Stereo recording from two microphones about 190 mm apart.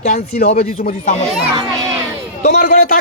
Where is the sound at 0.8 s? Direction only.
45° left (ahead or behind).